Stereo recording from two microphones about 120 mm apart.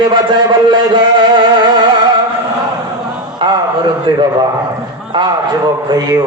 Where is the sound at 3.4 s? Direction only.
40° right (ahead or behind).